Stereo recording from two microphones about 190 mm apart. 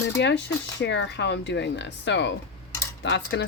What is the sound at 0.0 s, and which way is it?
Speech, 65° left (ahead or behind).